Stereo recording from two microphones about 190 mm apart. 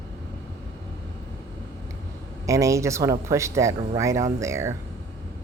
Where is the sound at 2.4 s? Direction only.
15° right (ahead or behind).